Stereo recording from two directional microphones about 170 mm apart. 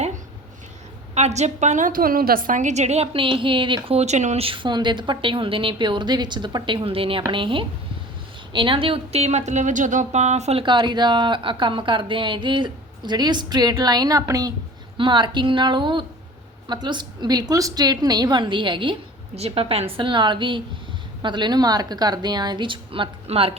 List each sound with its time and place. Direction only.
1.1 s a woman's voice: 40° right (ahead or behind)